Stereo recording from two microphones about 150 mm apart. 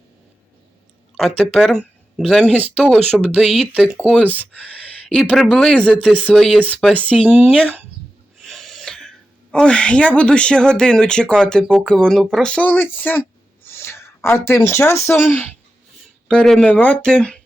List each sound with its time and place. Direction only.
1.1 s speech: centre (ahead or behind)
2.7 s speech: 5° right (ahead or behind)
5.2 s speech: 5° right (ahead or behind)
8.4 s snort: centre (ahead or behind)
9.5 s speech: 5° left (ahead or behind)
16.3 s speech: 5° left (ahead or behind)